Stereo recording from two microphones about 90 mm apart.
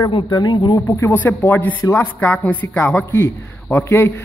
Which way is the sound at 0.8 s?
35° left (ahead or behind).